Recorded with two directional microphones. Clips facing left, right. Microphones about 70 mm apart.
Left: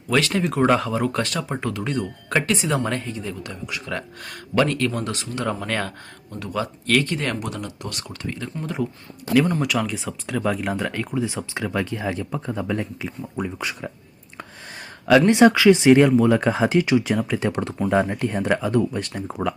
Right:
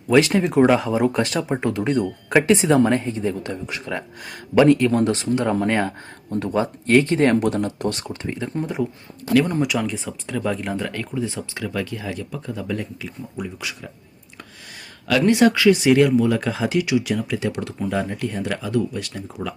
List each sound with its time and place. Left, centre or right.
0.1 s speech: centre
3.9 s speech: centre
7.4 s speech: right
8.6 s speech: centre; by 13.1 s left
13.3 s speech: left
15.3 s speech: left